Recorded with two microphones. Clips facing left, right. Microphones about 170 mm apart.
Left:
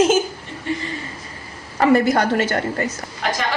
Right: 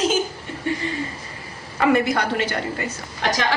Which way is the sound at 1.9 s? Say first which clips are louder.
Left 4 dB; 45° left (ahead or behind).